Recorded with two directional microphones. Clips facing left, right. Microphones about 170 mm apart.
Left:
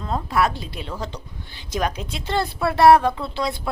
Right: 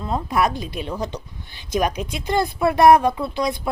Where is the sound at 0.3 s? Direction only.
20° right (ahead or behind).